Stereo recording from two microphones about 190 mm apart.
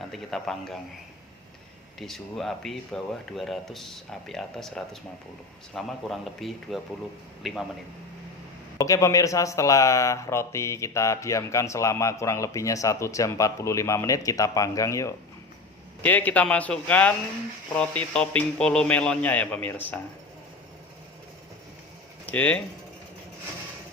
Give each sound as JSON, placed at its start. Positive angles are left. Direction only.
{"t": 0.1, "sound": "speech", "side_deg": 0}
{"t": 2.0, "sound": "speech", "side_deg": 0}
{"t": 8.8, "sound": "speech", "side_deg": 15}
{"t": 22.3, "sound": "speech", "side_deg": 5}